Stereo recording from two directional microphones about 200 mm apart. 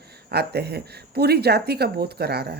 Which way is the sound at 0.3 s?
55° right (ahead or behind).